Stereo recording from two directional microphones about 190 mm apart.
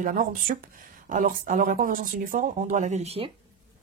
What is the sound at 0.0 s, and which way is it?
Speech, 45° right (ahead or behind).